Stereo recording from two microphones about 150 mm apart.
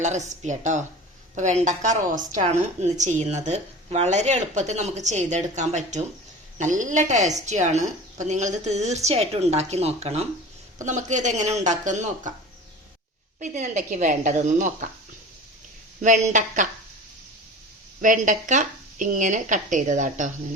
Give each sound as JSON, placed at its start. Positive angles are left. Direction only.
{"t": 0.0, "sound": "a woman's voice", "side_deg": -50}
{"t": 13.4, "sound": "speech", "side_deg": -50}
{"t": 16.0, "sound": "speech", "side_deg": -55}
{"t": 18.0, "sound": "speech", "side_deg": -60}